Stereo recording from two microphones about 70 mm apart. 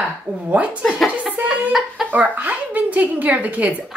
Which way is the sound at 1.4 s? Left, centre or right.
Right.